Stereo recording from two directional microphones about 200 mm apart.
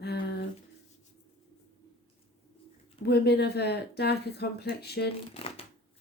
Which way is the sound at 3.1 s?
55° left (ahead or behind).